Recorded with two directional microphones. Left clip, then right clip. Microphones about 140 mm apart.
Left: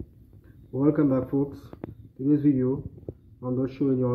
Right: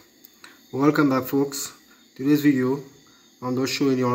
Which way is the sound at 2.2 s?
50° right (ahead or behind).